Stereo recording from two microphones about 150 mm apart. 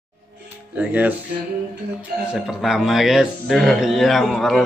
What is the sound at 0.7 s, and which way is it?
Speech, 10° right (ahead or behind).